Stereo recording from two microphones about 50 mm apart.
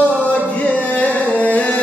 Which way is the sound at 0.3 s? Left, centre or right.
Left.